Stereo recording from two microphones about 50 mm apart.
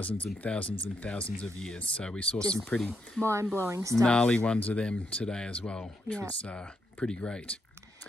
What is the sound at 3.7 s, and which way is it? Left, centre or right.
Speech, right.